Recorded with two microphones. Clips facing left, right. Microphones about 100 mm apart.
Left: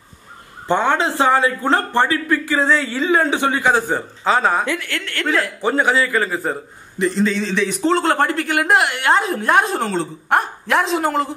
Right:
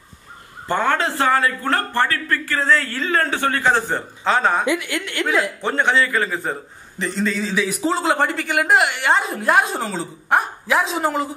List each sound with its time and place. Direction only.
0.7 s a man's voice: 20° left (ahead or behind); by 4.6 s centre (ahead or behind)
4.6 s a woman's voice: 15° right (ahead or behind)
5.2 s a man's voice: 5° right (ahead or behind)